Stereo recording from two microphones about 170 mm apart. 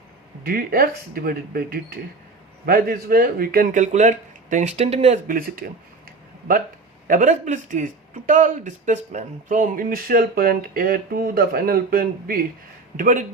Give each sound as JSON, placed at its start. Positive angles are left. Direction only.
{"t": 0.4, "sound": "speech", "side_deg": -60}
{"t": 5.4, "sound": "speech", "side_deg": -60}
{"t": 7.1, "sound": "speech", "side_deg": -50}